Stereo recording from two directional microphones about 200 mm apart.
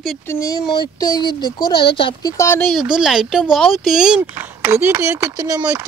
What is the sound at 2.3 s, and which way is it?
Speech, 15° left (ahead or behind).